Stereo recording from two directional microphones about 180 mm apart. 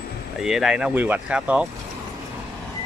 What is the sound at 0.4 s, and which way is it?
Speech, 5° right (ahead or behind).